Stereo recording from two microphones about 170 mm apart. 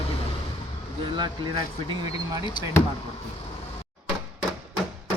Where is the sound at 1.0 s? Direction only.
25° right (ahead or behind).